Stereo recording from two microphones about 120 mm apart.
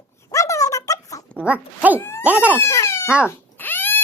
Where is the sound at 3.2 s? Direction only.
15° left (ahead or behind).